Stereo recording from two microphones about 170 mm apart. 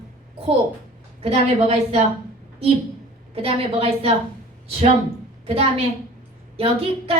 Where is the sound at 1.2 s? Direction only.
40° right (ahead or behind).